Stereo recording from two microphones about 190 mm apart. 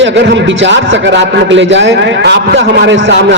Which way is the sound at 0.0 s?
70° right (ahead or behind).